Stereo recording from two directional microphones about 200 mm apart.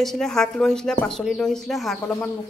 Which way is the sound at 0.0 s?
Centre (ahead or behind).